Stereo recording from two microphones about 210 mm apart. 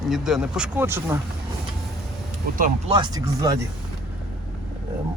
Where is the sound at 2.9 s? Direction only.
20° right (ahead or behind).